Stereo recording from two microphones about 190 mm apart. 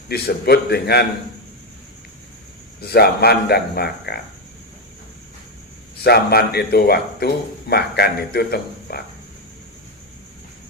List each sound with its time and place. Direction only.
0.1 s speech: 55° left (ahead or behind)
2.8 s speech: 55° left (ahead or behind)
6.0 s speech: 55° left (ahead or behind)